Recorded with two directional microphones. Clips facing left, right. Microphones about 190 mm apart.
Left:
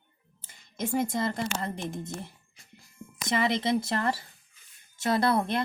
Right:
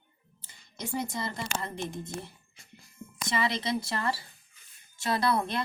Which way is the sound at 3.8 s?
50° left (ahead or behind).